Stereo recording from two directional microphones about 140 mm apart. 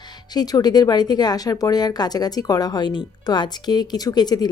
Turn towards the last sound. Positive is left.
turn(degrees=30)  # may be behind; listen again after turning